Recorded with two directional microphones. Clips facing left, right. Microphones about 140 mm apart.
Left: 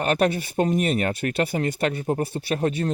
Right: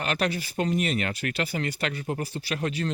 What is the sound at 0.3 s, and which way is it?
Speech, 25° left (ahead or behind).